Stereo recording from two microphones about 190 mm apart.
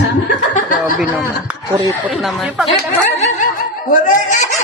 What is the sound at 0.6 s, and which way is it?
Speech, 45° left (ahead or behind).